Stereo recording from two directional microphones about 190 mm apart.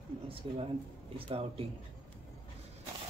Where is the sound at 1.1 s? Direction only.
30° right (ahead or behind).